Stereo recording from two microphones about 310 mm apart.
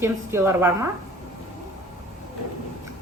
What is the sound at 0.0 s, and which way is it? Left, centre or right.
Speech, centre.